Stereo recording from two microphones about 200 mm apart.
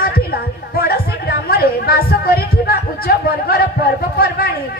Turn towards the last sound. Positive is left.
turn(degrees=50)  # may be behind; listen again after turning